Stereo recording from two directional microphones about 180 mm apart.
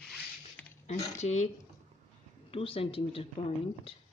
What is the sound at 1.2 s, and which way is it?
Speech, 40° left (ahead or behind).